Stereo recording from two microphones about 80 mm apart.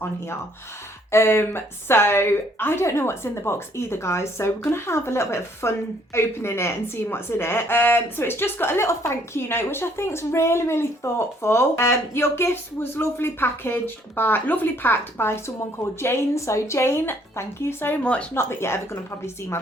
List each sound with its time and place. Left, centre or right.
1.1 s a woman's voice: left
18.0 s speech: centre
18.3 s a woman's voice: left